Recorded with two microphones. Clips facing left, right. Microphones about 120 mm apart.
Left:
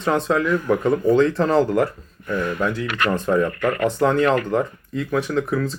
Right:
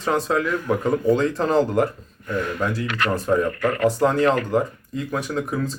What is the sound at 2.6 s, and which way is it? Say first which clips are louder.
Speech: left 2 dB; 35° right (ahead or behind).